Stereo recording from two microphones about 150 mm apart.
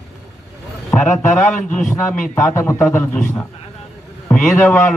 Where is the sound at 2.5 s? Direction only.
15° left (ahead or behind).